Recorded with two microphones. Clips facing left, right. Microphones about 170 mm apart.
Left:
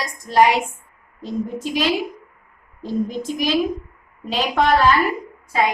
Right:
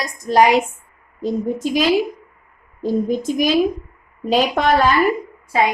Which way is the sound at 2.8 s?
45° right (ahead or behind).